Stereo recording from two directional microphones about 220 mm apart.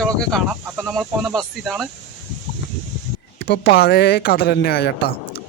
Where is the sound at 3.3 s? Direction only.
50° left (ahead or behind).